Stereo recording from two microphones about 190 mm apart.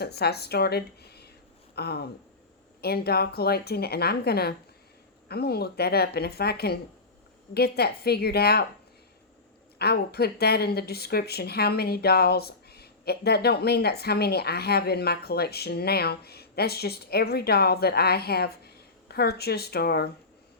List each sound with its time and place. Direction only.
0.0 s speech: 60° left (ahead or behind)
9.7 s speech: 55° left (ahead or behind)